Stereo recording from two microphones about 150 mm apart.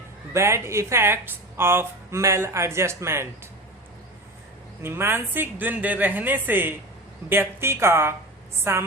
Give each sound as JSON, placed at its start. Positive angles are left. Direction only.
{"t": 0.3, "sound": "a woman's voice", "side_deg": -20}
{"t": 4.8, "sound": "a woman's voice", "side_deg": -15}